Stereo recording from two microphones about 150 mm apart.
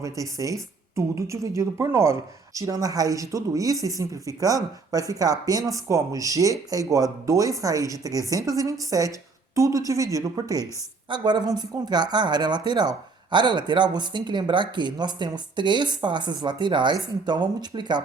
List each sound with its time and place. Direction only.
0.0 s a woman's voice: 20° right (ahead or behind)